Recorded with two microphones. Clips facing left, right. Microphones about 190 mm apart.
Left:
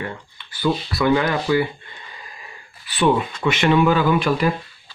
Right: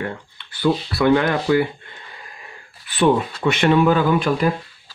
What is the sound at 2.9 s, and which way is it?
Speech, 45° right (ahead or behind).